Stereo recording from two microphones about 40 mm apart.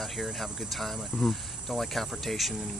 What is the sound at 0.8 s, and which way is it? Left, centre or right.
Speech, centre.